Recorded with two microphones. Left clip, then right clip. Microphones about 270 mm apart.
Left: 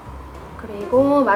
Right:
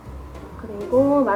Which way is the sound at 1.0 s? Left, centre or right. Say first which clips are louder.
Left 2 dB; right.